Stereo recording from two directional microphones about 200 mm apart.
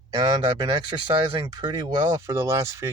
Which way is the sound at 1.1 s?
20° right (ahead or behind).